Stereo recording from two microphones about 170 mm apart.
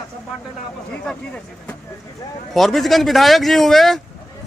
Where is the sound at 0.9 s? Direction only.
5° left (ahead or behind).